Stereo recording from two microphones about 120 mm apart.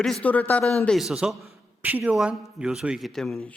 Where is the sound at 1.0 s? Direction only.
5° right (ahead or behind).